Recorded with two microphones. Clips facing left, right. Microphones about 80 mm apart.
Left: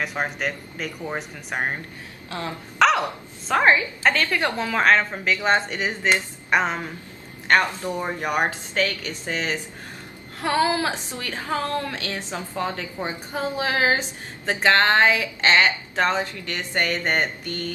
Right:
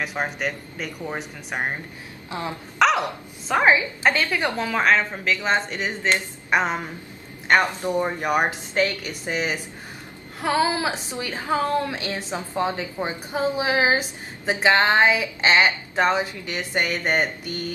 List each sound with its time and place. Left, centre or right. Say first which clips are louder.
0.0 s a woman's voice: even; centre
2.3 s a man's voice: right 1 dB; centre
2.8 s a woman's voice: left 1 dB; centre
6.5 s a woman's voice: even; centre
7.4 s a man's voice: right 1 dB; centre
8.0 s a woman's voice: right 1 dB; centre